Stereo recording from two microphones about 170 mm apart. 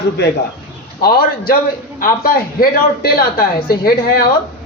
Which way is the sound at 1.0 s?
60° left (ahead or behind).